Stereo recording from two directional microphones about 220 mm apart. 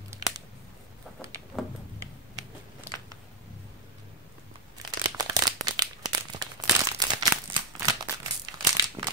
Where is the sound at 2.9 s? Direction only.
10° right (ahead or behind).